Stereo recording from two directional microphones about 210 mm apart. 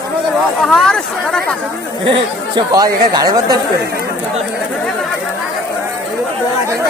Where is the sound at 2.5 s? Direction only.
20° right (ahead or behind).